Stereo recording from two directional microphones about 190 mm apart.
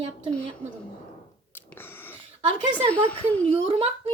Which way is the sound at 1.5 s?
10° left (ahead or behind).